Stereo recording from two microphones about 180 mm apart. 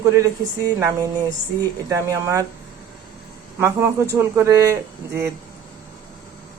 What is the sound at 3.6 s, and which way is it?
Speech, 15° right (ahead or behind).